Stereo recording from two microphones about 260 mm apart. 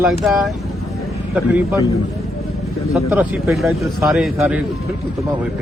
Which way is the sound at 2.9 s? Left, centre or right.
Centre.